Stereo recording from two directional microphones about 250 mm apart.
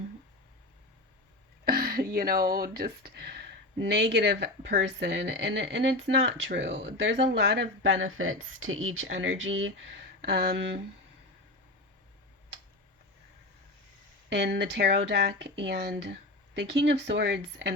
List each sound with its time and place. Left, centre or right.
1.6 s a sound: right
2.7 s speech: right
14.3 s speech: right